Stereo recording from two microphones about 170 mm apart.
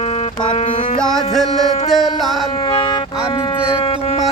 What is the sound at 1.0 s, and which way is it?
Music, 5° left (ahead or behind).